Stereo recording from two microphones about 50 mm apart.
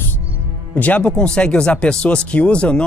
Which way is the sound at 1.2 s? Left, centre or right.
Left.